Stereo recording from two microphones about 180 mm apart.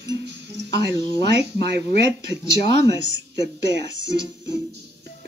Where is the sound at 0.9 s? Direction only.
20° left (ahead or behind).